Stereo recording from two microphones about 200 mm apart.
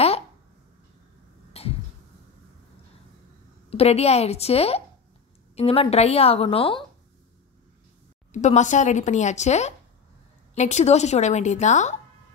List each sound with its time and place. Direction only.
1.6 s a sound: 30° left (ahead or behind)
3.7 s a woman's voice: 30° left (ahead or behind)
8.3 s speech: 35° left (ahead or behind)